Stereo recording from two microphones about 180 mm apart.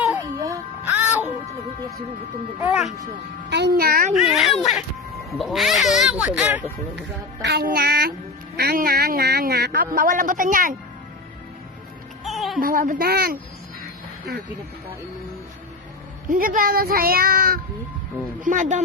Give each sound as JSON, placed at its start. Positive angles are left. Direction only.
{"t": 0.1, "sound": "music", "side_deg": -15}
{"t": 2.6, "sound": "speech", "side_deg": -10}
{"t": 3.5, "sound": "music", "side_deg": -65}
{"t": 4.2, "sound": "speech", "side_deg": 0}
{"t": 7.4, "sound": "music", "side_deg": -65}
{"t": 8.5, "sound": "a man's voice", "side_deg": -55}
{"t": 12.2, "sound": "music", "side_deg": 0}
{"t": 12.5, "sound": "a man's voice", "side_deg": -50}
{"t": 16.3, "sound": "a man's voice", "side_deg": -50}